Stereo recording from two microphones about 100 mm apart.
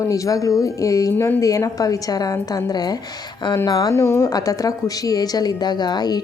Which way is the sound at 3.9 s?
30° left (ahead or behind).